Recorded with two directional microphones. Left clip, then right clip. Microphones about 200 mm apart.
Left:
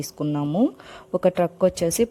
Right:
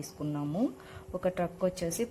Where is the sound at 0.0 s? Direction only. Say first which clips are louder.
Left 10 dB; 40° left (ahead or behind).